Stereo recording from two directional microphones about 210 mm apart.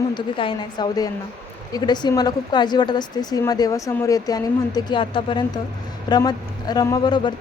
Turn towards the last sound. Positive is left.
turn(degrees=20)  # may be behind; listen again after turning